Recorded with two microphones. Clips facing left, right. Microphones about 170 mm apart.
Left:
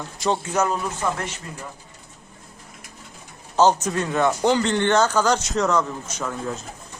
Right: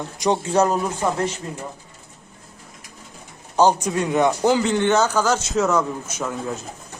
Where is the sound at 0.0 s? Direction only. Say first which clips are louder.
Right 3 dB; 20° right (ahead or behind).